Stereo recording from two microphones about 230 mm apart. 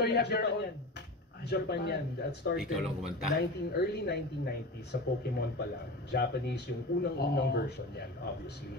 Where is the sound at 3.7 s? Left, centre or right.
Left.